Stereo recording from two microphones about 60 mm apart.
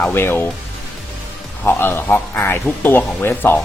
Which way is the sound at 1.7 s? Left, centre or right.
Left.